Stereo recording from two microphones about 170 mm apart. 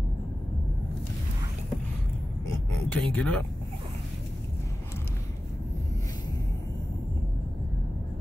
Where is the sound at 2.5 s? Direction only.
10° left (ahead or behind).